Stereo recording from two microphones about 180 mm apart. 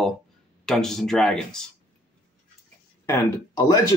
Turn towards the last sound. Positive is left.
turn(degrees=20)  # may be behind; listen again after turning